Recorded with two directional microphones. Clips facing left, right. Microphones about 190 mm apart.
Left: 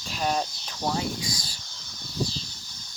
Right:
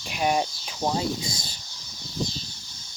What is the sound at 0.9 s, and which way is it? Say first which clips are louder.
Speech: right 1 dB; 25° right (ahead or behind).